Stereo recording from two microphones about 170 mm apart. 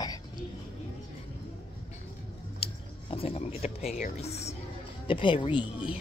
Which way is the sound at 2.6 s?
35° left (ahead or behind).